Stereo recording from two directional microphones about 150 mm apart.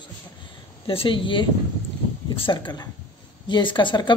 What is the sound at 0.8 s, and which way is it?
Speech, 35° left (ahead or behind).